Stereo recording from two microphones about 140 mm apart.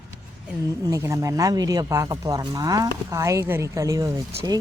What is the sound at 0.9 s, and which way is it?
Speech, 20° right (ahead or behind).